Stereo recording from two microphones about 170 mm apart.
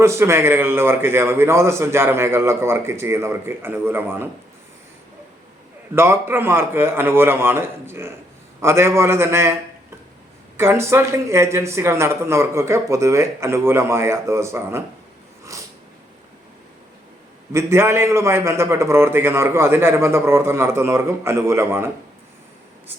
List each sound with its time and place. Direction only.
0.0 s a man's voice: 15° right (ahead or behind)
5.9 s a man's voice: 15° right (ahead or behind)
10.6 s a man's voice: 15° right (ahead or behind)
17.5 s a man's voice: 15° right (ahead or behind)